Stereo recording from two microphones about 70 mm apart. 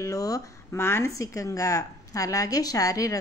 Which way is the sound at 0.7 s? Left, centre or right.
Left.